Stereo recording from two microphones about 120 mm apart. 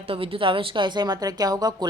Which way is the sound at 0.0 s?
50° right (ahead or behind).